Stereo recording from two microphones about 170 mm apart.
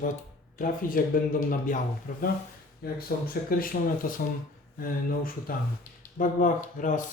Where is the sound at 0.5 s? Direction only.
55° left (ahead or behind).